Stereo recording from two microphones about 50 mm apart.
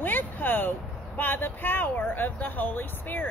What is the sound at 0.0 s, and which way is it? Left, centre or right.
Speech, left.